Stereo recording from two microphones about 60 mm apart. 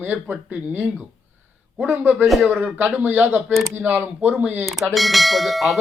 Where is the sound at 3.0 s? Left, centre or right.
Right.